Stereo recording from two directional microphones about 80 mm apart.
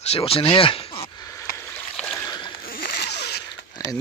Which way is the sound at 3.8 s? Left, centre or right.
Left.